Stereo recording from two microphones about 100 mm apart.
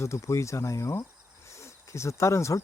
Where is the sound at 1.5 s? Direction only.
30° left (ahead or behind).